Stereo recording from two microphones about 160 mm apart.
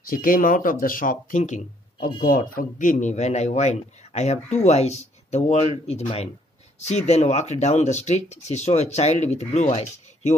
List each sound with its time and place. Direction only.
0.0 s a man's voice: 60° left (ahead or behind)